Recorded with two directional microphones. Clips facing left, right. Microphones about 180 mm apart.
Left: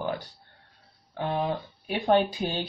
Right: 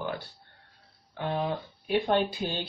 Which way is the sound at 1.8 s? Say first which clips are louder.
Left 2 dB; 50° left (ahead or behind).